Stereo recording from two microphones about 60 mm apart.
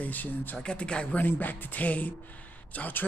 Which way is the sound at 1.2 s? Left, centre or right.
Left.